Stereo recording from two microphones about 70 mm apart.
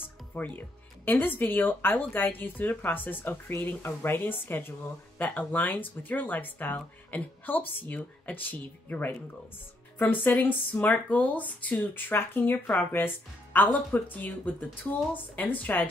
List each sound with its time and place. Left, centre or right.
0.3 s speech: left